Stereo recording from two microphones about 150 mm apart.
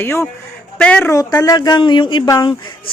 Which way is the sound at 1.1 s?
25° left (ahead or behind).